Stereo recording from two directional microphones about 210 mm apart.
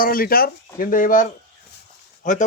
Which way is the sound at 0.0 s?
45° left (ahead or behind).